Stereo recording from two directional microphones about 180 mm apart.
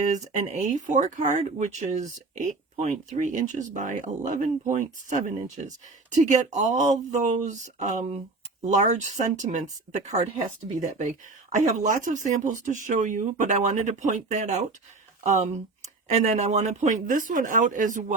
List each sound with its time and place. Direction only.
0.0 s speech: 40° right (ahead or behind)
11.5 s speech: 45° right (ahead or behind)